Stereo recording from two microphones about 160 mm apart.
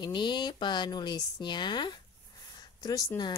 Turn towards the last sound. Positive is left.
turn(degrees=20)  # may be behind; listen again after turning